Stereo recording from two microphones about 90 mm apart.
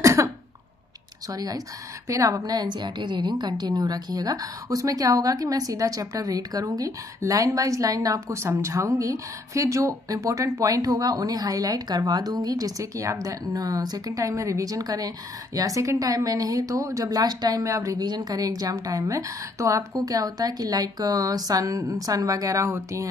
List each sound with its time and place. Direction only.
0.0 s cough: 35° right (ahead or behind)
1.3 s a woman's voice: 45° right (ahead or behind)